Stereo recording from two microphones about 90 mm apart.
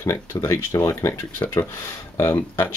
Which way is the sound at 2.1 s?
30° left (ahead or behind).